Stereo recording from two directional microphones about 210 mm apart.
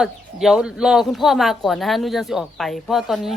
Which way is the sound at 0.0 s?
Centre (ahead or behind).